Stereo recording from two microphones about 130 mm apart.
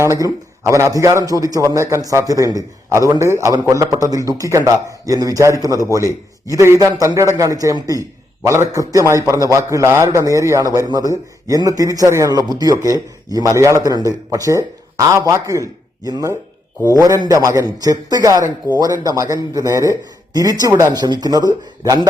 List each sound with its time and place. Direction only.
0.0 s a man's voice: 25° right (ahead or behind)